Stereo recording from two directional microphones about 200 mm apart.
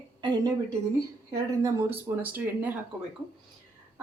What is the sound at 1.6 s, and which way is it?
Speech, 10° right (ahead or behind).